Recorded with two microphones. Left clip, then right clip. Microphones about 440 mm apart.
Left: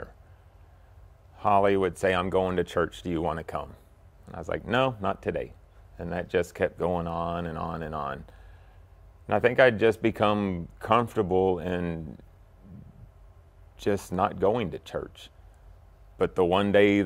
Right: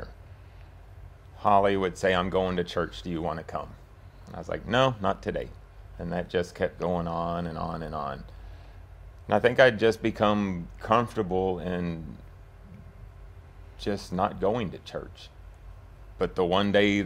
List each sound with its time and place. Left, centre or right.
1.4 s speech: left
9.3 s speech: left
13.8 s speech: left